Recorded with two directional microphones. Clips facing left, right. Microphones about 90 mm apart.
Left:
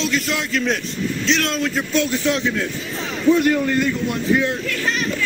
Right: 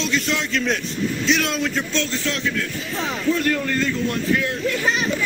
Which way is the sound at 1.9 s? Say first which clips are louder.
Left 5 dB; 10° left (ahead or behind).